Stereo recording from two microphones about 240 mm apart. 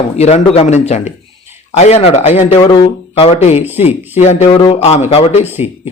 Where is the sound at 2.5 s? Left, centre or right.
Centre.